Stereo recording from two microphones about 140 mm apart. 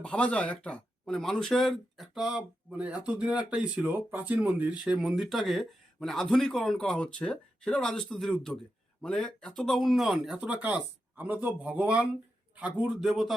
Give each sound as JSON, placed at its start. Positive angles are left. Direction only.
{"t": 0.0, "sound": "speech", "side_deg": 5}